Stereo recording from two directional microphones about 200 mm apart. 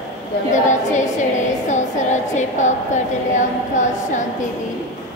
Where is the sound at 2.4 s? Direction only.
35° left (ahead or behind).